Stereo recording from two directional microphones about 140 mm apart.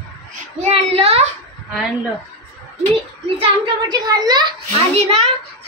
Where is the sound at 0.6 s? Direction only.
45° right (ahead or behind).